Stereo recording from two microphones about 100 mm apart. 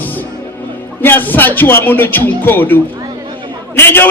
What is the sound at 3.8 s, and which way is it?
Speech, 25° left (ahead or behind).